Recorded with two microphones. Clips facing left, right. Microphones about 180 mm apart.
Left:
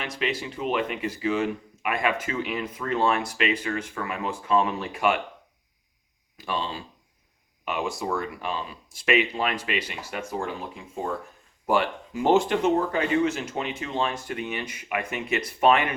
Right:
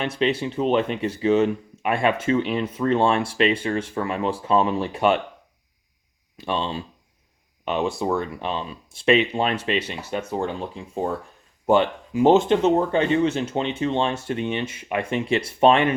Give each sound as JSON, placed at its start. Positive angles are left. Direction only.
{"t": 0.2, "sound": "speech", "side_deg": -30}
{"t": 6.3, "sound": "speech", "side_deg": -25}